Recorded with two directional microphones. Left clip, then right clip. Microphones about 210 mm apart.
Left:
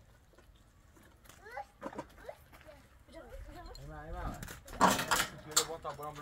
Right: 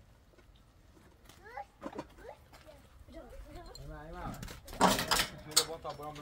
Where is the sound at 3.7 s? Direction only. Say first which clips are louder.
Left 1 dB; 25° left (ahead or behind).